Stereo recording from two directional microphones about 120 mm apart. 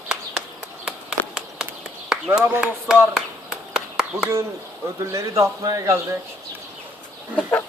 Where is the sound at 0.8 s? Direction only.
5° right (ahead or behind).